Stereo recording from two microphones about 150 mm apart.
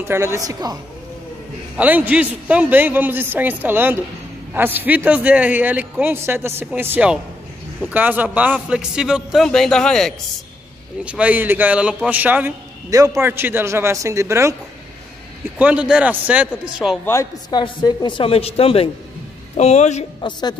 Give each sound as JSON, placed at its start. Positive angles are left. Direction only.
{"t": 0.0, "sound": "a woman's voice", "side_deg": -15}
{"t": 1.8, "sound": "a man's voice", "side_deg": -10}
{"t": 11.1, "sound": "a man's voice", "side_deg": -10}
{"t": 15.6, "sound": "a man's voice", "side_deg": -5}
{"t": 17.0, "sound": "a man's voice", "side_deg": 20}
{"t": 17.5, "sound": "a woman's voice", "side_deg": 30}
{"t": 20.2, "sound": "a woman's voice", "side_deg": 30}